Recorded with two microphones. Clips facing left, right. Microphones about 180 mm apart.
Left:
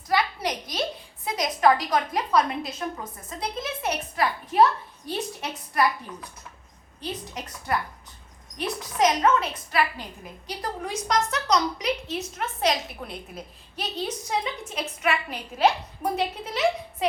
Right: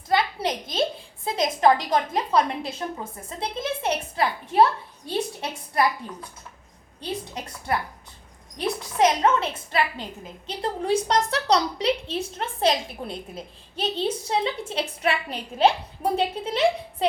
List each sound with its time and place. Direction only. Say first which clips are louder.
0.1 s a woman's voice: right 2 dB; 25° right (ahead or behind)
9.0 s a woman's voice: right 1 dB; 30° right (ahead or behind)